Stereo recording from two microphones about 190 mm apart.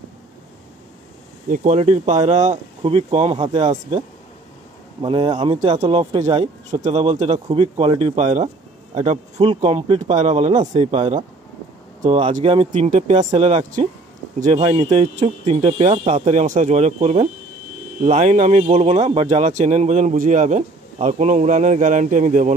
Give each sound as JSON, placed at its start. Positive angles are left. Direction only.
{"t": 1.5, "sound": "a man's voice", "side_deg": -40}
{"t": 5.0, "sound": "a man's voice", "side_deg": -25}